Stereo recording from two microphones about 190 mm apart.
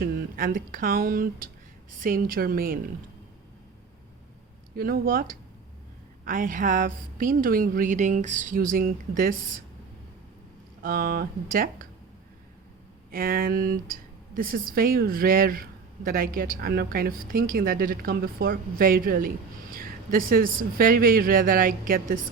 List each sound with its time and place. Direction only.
0.0 s speech: 50° right (ahead or behind)
4.8 s speech: 50° right (ahead or behind)
10.8 s speech: 50° right (ahead or behind)
13.1 s speech: 50° right (ahead or behind)